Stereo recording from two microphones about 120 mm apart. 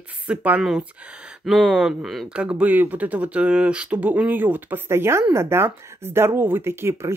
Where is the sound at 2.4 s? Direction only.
10° right (ahead or behind).